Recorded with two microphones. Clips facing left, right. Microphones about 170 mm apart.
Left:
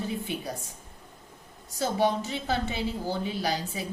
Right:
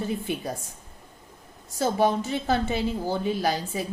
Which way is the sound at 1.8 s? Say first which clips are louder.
Right 3 dB; 50° right (ahead or behind).